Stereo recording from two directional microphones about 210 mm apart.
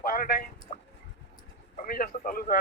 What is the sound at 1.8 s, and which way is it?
Speech, 45° left (ahead or behind).